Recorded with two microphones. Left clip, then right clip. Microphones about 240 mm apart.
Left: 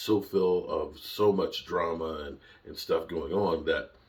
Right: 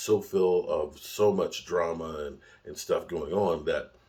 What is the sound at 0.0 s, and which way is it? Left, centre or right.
Speech, centre.